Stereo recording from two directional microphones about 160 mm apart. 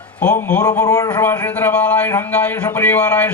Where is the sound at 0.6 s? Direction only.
20° left (ahead or behind).